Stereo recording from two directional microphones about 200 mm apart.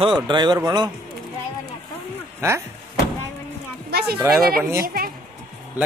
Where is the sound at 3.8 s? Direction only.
55° right (ahead or behind).